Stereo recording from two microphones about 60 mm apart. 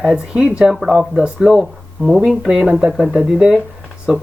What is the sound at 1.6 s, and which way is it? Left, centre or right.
Speech, centre.